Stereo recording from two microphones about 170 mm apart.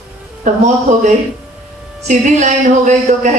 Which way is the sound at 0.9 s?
45° right (ahead or behind).